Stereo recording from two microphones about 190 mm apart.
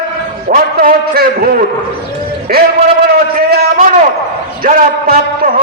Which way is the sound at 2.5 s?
55° right (ahead or behind).